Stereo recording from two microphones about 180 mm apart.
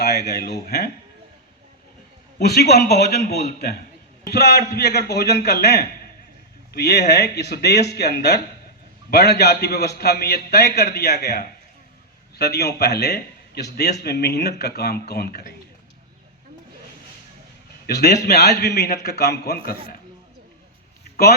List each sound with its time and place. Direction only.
0.0 s speech: 65° left (ahead or behind)
2.4 s a man's voice: 65° left (ahead or behind)
17.8 s a man's voice: 65° left (ahead or behind)